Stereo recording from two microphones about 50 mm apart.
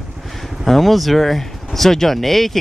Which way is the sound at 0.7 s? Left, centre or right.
Centre.